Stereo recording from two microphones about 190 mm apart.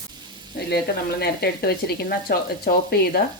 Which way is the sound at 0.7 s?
55° left (ahead or behind).